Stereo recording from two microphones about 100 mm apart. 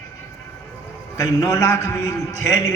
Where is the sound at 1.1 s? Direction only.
35° left (ahead or behind).